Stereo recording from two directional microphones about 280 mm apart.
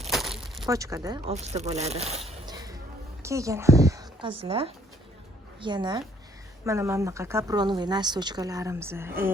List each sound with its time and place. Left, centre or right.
0.1 s crushing: centre
0.7 s speech: centre